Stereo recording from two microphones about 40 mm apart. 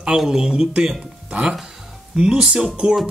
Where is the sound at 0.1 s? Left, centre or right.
Centre.